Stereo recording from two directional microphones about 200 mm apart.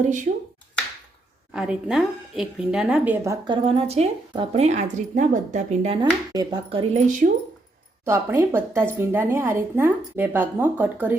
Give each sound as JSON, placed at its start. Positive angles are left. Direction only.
{"t": 0.0, "sound": "speech", "side_deg": -40}
{"t": 1.5, "sound": "a woman's voice", "side_deg": -5}
{"t": 3.4, "sound": "speech", "side_deg": -25}
{"t": 8.0, "sound": "speech", "side_deg": -15}